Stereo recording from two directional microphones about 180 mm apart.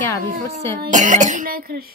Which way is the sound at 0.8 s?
45° right (ahead or behind).